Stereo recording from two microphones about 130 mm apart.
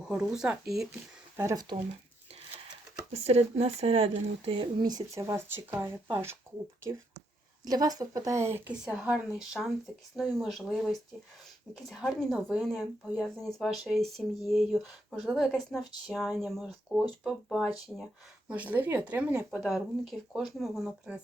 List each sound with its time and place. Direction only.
0.1 s speech: 5° right (ahead or behind)
1.4 s speech: 25° right (ahead or behind)
3.1 s speech: 55° right (ahead or behind); by 6.3 s 20° right (ahead or behind)
7.6 s speech: 30° right (ahead or behind)
8.8 s speech: 5° right (ahead or behind)
19.5 s speech: centre (ahead or behind)